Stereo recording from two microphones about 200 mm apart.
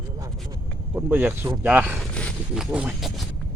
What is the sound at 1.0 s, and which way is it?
Speech, 10° right (ahead or behind).